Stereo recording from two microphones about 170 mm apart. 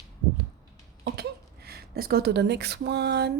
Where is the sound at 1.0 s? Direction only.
70° right (ahead or behind).